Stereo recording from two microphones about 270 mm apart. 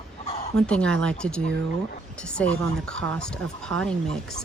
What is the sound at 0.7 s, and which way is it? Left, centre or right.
Speech, centre.